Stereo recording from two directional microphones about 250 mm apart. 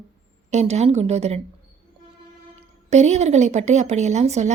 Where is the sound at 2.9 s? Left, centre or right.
Right.